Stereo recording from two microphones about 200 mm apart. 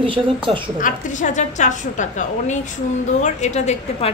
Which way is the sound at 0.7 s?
40° left (ahead or behind).